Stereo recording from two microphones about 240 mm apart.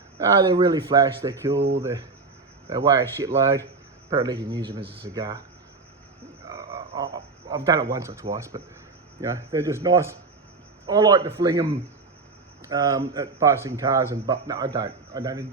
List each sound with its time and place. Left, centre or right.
0.2 s speech: centre
1.5 s speech: right
1.8 s speech: centre
6.5 s speech: centre